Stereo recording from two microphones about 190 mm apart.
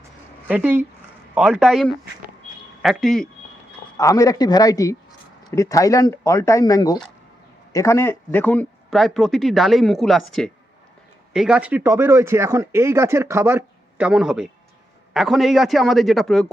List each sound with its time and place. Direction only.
0.4 s speech: 10° right (ahead or behind)
3.9 s speech: 20° left (ahead or behind); by 16.5 s centre (ahead or behind)